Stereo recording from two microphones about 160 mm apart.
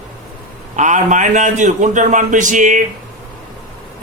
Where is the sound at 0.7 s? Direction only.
50° right (ahead or behind).